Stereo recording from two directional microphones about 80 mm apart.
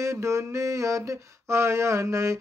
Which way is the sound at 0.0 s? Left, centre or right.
Right.